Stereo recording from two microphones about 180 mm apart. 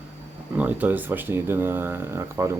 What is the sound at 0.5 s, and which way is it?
Speech, 10° right (ahead or behind).